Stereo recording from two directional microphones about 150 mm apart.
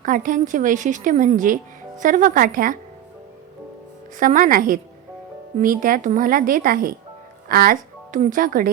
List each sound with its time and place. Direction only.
0.0 s a woman's voice: 60° right (ahead or behind)
4.2 s a woman's voice: 65° right (ahead or behind)